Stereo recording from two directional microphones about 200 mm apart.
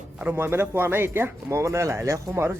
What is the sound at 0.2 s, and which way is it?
Speech, 10° right (ahead or behind).